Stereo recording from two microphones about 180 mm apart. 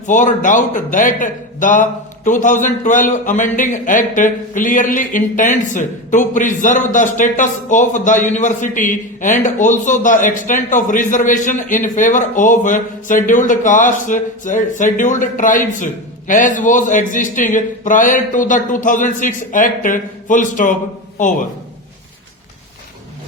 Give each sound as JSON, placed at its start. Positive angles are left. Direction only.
{"t": 0.0, "sound": "a man's voice", "side_deg": 45}